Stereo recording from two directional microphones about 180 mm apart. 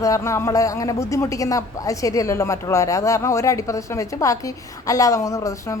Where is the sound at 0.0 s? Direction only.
15° left (ahead or behind).